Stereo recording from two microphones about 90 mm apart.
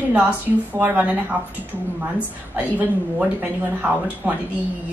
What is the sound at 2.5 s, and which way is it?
A woman's voice, 20° right (ahead or behind).